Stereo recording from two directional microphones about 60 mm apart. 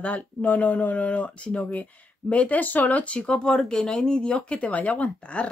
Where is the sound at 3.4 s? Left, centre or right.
Centre.